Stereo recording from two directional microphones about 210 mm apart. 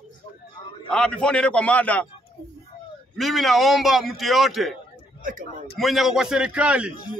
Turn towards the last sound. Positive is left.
turn(degrees=-5)  # may be behind; listen again after turning